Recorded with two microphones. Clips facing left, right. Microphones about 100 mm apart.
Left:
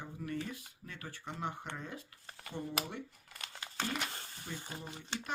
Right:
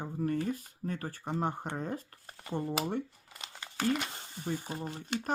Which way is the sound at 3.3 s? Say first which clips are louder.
Right 2 dB; 15° right (ahead or behind).